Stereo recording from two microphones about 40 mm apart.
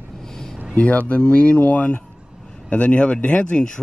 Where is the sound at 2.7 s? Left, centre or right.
Left.